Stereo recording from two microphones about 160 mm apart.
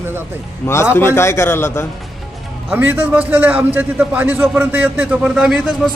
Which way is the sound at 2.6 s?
10° right (ahead or behind).